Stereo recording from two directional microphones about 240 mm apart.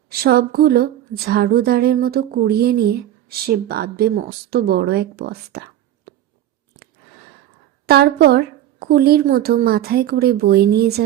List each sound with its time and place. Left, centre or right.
0.1 s a woman's voice: right
7.9 s a woman's voice: right